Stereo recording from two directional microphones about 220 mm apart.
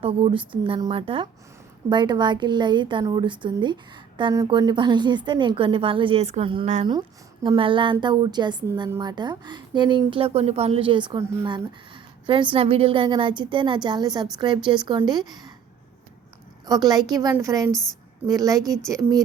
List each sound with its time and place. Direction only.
0.0 s a woman's voice: 25° right (ahead or behind)
16.6 s a woman's voice: 15° right (ahead or behind)
17.7 s a woman's voice: centre (ahead or behind)
18.3 s a woman's voice: 15° right (ahead or behind)